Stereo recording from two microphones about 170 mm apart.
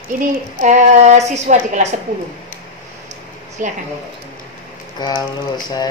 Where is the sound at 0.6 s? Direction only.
45° right (ahead or behind).